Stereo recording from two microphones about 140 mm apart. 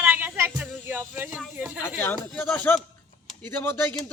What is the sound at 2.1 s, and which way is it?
Speech, 10° left (ahead or behind).